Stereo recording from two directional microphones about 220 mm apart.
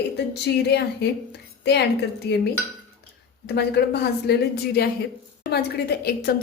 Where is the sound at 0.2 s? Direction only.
50° left (ahead or behind).